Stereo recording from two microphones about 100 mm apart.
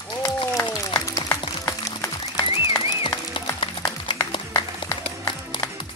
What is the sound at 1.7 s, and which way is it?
Music, 30° left (ahead or behind).